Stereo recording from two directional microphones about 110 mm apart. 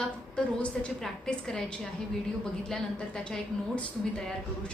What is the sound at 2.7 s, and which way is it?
Speech, 5° left (ahead or behind).